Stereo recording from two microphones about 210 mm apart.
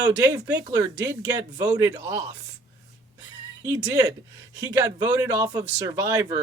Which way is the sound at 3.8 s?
15° right (ahead or behind).